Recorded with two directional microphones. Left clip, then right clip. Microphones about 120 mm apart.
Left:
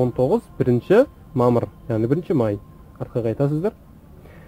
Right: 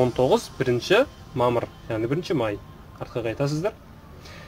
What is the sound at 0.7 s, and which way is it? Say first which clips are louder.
A man's voice: left 4 dB; 60° left (ahead or behind).